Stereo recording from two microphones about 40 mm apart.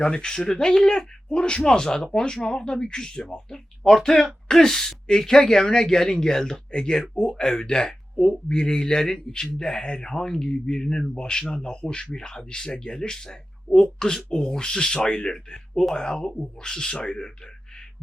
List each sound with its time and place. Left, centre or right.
0.0 s speech: centre
7.0 s speech: centre